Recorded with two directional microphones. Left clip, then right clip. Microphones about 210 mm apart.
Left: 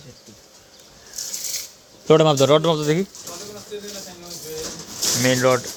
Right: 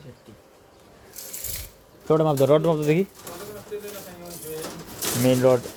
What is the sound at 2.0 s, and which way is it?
Speech, 15° left (ahead or behind).